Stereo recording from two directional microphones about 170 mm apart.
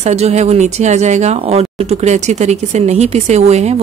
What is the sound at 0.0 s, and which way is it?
Speech, 40° right (ahead or behind).